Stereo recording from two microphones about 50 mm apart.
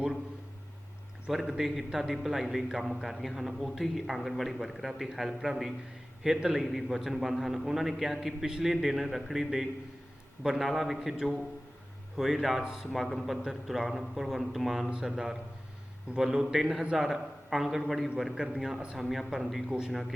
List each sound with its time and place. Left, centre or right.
1.3 s a man's voice: centre
12.6 s a man's voice: centre
12.9 s a man's voice: centre